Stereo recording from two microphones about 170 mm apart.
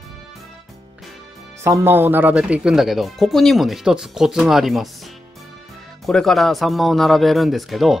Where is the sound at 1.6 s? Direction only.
15° right (ahead or behind).